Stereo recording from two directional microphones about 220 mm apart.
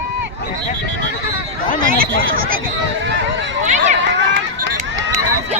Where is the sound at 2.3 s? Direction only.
40° right (ahead or behind).